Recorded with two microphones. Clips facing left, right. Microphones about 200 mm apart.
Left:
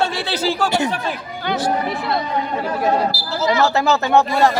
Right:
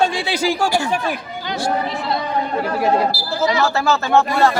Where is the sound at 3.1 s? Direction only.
50° right (ahead or behind).